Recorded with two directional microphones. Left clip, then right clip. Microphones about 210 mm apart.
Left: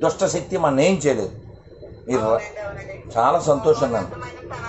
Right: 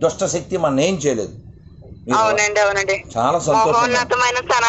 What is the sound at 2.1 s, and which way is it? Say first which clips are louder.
Speech: right 5 dB; 50° right (ahead or behind).